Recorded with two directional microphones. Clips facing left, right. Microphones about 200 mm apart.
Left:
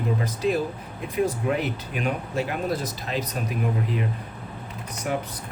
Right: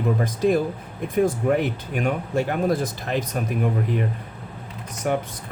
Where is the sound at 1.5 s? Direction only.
50° right (ahead or behind).